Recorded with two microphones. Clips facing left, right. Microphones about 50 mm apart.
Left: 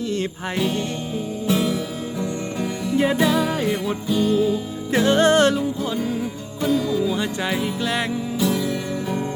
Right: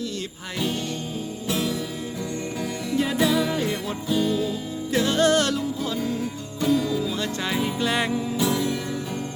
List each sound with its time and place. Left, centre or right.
1.5 s music: centre
2.9 s music: left
3.2 s music: centre
4.3 s music: centre
4.9 s music: left
6.6 s music: centre
7.0 s music: centre
7.5 s music: centre